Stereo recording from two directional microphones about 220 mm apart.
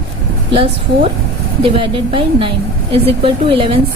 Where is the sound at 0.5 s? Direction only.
25° right (ahead or behind).